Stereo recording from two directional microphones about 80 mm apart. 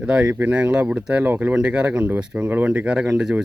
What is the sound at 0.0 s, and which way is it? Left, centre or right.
Speech, centre.